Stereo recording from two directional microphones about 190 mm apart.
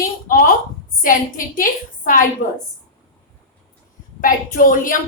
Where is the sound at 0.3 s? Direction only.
45° left (ahead or behind).